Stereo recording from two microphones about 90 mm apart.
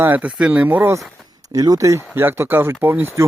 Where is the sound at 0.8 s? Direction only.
30° right (ahead or behind).